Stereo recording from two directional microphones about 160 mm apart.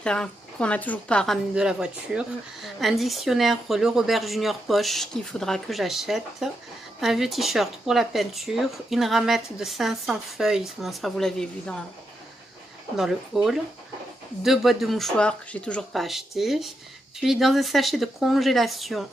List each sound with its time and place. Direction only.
0.0 s speech: 5° left (ahead or behind)
13.0 s speech: centre (ahead or behind)